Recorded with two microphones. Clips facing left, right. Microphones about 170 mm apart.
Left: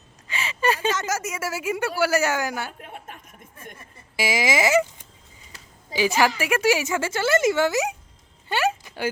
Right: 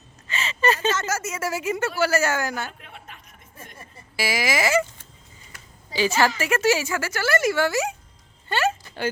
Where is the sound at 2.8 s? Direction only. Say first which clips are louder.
Left 5 dB; 45° left (ahead or behind).